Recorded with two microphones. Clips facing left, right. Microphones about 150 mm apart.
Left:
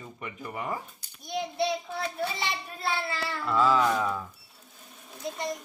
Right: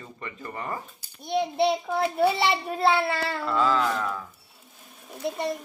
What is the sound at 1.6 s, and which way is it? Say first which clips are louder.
A child's voice: right 5 dB; 60° right (ahead or behind).